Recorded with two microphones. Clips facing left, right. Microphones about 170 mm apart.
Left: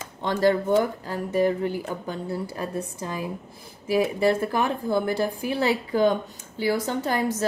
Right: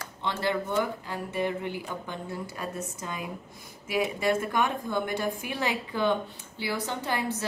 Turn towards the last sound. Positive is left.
turn(degrees=40)  # may be behind; listen again after turning